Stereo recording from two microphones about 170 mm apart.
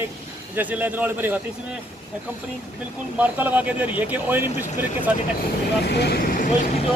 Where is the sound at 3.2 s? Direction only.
10° right (ahead or behind).